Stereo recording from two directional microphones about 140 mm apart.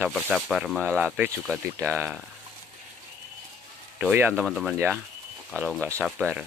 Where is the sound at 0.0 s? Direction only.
Centre (ahead or behind).